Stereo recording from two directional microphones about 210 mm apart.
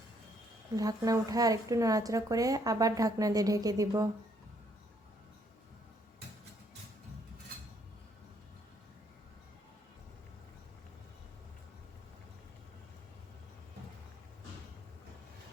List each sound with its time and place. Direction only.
0.8 s a woman's voice: 15° right (ahead or behind)